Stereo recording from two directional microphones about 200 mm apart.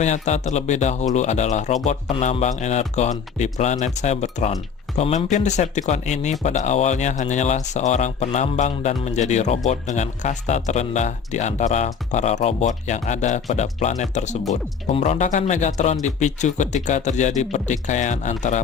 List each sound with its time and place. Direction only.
0.0 s speech: 35° left (ahead or behind)